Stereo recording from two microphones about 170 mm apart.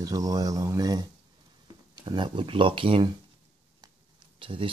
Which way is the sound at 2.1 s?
25° right (ahead or behind).